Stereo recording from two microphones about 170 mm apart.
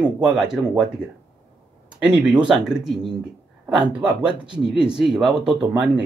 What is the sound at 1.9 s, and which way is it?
Speech, 5° right (ahead or behind).